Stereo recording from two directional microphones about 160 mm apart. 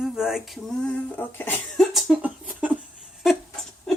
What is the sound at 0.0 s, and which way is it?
Speech, 5° right (ahead or behind).